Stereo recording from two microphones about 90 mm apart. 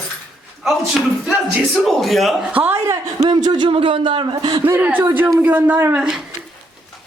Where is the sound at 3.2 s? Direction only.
55° right (ahead or behind).